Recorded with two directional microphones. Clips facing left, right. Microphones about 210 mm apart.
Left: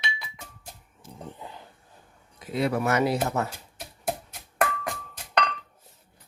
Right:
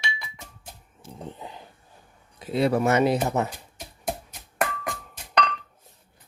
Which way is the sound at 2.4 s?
30° right (ahead or behind).